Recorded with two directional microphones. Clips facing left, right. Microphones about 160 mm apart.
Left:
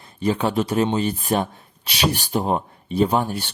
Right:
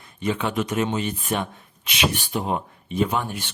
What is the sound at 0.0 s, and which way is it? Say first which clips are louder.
Speech: left 4 dB; 35° left (ahead or behind).